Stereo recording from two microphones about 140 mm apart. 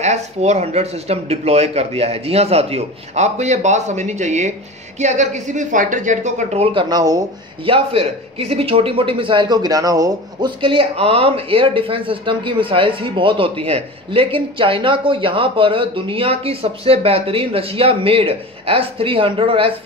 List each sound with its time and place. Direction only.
0.0 s a woman's voice: 50° right (ahead or behind); by 7.2 s 25° right (ahead or behind)
7.6 s speech: 40° right (ahead or behind); by 10.5 s 25° right (ahead or behind)
10.6 s speech: 40° right (ahead or behind)